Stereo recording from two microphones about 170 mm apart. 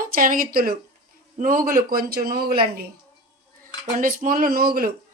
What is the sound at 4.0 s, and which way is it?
Speech, 50° right (ahead or behind).